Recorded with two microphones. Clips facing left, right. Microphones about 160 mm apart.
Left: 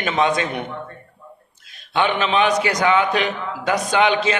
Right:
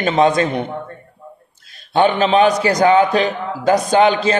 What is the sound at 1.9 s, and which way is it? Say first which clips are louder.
A man's voice: right 6 dB; 40° right (ahead or behind).